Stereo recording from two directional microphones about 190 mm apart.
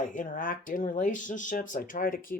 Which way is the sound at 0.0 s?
45° left (ahead or behind).